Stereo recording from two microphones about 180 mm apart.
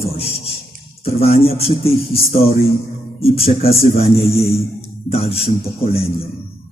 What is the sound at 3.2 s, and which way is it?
A man's voice, 35° left (ahead or behind).